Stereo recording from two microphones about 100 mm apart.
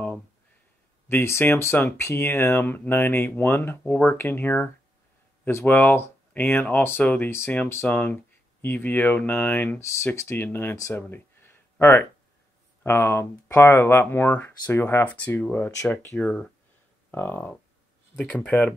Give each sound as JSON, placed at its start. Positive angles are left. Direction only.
{"t": 1.0, "sound": "speech", "side_deg": 25}
{"t": 10.8, "sound": "a sound", "side_deg": 25}
{"t": 12.8, "sound": "speech", "side_deg": 20}
{"t": 16.2, "sound": "speech", "side_deg": 10}
{"t": 17.1, "sound": "speech", "side_deg": 20}